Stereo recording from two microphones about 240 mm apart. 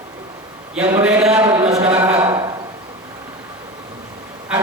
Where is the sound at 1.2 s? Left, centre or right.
Centre.